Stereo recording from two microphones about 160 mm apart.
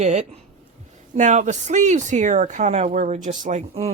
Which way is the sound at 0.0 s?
45° right (ahead or behind).